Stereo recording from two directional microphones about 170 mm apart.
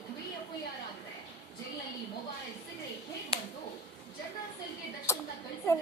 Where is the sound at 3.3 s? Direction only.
35° left (ahead or behind).